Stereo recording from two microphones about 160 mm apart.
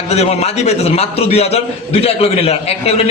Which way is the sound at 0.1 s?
40° left (ahead or behind).